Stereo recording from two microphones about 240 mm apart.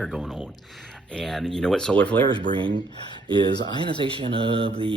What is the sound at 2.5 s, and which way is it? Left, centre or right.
Speech, right.